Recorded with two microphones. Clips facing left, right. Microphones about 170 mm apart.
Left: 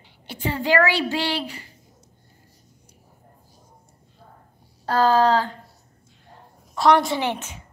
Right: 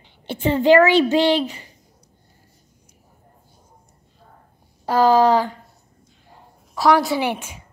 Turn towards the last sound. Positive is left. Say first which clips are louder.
# right 3 dB
turn(degrees=-10)  # may be behind; listen again after turning